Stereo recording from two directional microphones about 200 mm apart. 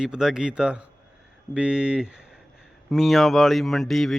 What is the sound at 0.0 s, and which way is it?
A man's voice, 5° right (ahead or behind).